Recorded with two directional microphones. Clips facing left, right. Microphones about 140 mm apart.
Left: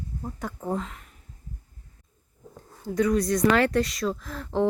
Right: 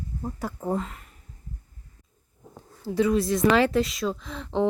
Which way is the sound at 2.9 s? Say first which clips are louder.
Right 1 dB; 25° right (ahead or behind).